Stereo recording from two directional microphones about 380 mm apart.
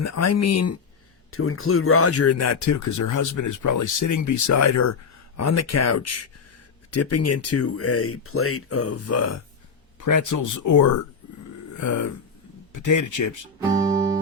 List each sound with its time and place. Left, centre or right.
0.0 s speech: left
10.0 s speech: left
13.8 s music: centre